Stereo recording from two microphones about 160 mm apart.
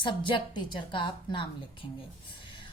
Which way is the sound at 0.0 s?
30° left (ahead or behind).